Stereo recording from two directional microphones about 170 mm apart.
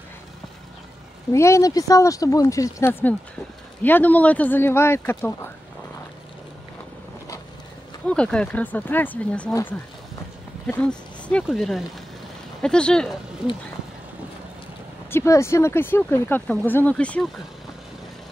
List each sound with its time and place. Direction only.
1.3 s speech: 15° left (ahead or behind)
8.1 s speech: 5° left (ahead or behind)
10.7 s speech: 5° left (ahead or behind)
15.0 s speech: 15° left (ahead or behind)